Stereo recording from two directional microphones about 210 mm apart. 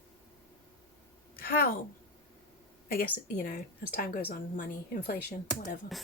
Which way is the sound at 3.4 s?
40° left (ahead or behind).